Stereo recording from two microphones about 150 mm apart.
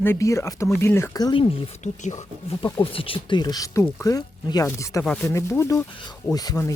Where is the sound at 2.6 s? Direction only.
35° left (ahead or behind).